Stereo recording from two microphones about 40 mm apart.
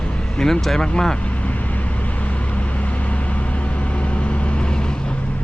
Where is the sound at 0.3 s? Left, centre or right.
Centre.